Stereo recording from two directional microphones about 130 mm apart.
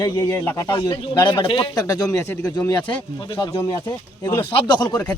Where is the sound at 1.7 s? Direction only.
25° left (ahead or behind).